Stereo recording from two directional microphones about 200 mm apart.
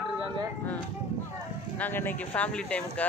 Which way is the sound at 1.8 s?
10° left (ahead or behind).